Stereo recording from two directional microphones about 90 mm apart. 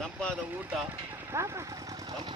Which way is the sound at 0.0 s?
10° left (ahead or behind).